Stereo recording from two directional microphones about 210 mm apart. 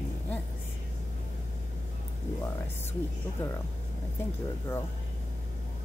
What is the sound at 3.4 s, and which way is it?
Speech, 5° left (ahead or behind).